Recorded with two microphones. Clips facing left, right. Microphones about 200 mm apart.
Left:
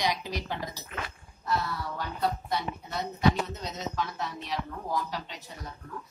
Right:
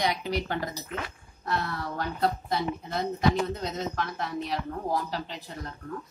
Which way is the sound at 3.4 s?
55° right (ahead or behind).